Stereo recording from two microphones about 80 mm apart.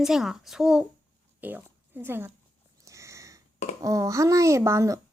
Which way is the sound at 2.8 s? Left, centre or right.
Right.